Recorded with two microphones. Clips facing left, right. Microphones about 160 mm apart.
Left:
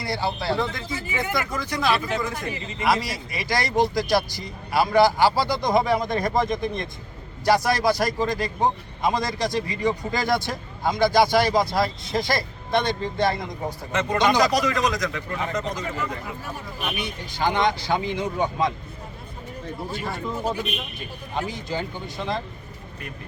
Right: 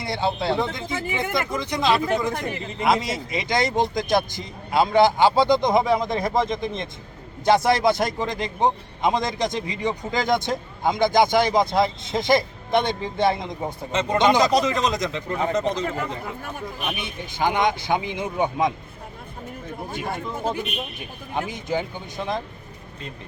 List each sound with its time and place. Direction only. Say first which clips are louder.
0.0 s a man's voice: right 2 dB; 20° right (ahead or behind)
17.0 s a man's voice: right 1 dB; 20° right (ahead or behind)
21.3 s speech: right 2 dB; 20° right (ahead or behind)